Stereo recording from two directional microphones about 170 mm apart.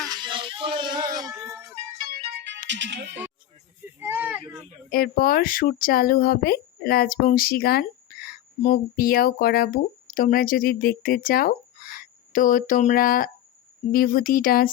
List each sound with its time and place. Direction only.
0.1 s speech: 25° right (ahead or behind)
2.0 s music: 75° right (ahead or behind)
2.6 s speech: 90° right
4.0 s speech: 10° right (ahead or behind)
4.9 s speech: 60° left (ahead or behind)